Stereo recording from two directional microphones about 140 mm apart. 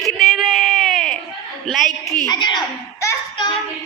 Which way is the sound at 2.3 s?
30° left (ahead or behind).